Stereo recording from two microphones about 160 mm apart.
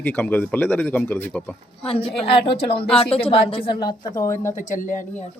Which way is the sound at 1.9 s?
35° left (ahead or behind).